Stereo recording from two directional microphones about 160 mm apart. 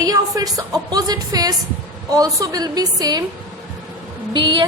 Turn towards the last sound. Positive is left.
turn(degrees=-30)  # may be behind; listen again after turning